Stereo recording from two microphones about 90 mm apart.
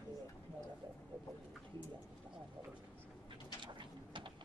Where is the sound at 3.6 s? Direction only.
60° right (ahead or behind).